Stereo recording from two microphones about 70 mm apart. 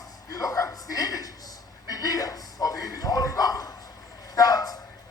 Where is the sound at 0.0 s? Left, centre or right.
Left.